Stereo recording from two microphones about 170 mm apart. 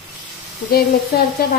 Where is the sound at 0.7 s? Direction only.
65° left (ahead or behind).